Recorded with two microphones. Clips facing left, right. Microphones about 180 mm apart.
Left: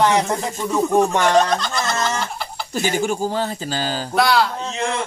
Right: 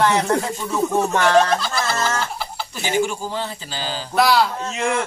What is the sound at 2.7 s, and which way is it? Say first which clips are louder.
Speech: left 1 dB; 45° left (ahead or behind).